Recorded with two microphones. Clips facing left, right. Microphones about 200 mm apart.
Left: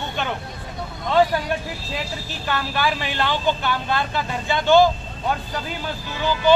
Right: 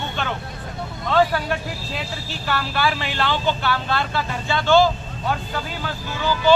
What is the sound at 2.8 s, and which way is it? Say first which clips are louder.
Speech: even; 15° left (ahead or behind).